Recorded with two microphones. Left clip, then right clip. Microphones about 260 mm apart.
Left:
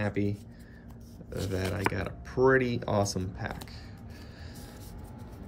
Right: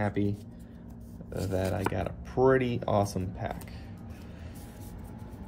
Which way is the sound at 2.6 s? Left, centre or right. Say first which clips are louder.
Right 1 dB; left.